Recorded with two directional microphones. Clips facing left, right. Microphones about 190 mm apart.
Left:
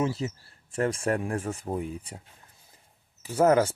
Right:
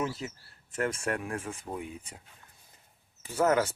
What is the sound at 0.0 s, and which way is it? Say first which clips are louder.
Speech: left 5 dB; 25° left (ahead or behind).